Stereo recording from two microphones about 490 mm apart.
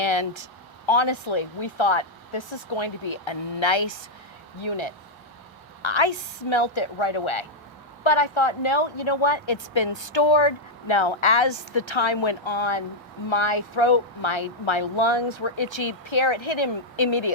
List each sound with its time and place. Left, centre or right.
0.0 s speech: left